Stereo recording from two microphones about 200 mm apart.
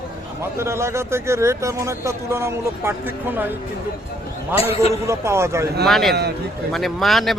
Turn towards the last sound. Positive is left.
turn(degrees=0)  # may be behind; listen again after turning